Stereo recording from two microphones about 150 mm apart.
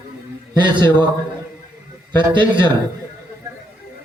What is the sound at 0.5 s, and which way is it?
Speech, 30° right (ahead or behind).